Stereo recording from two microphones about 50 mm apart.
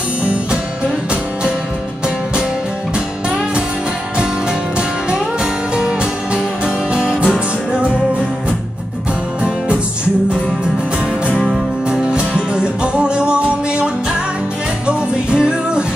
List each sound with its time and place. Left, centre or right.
0.2 s music: right
5.8 s music: centre
11.4 s music: centre
14.9 s music: centre